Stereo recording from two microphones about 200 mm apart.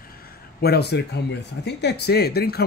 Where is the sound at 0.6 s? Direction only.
55° left (ahead or behind).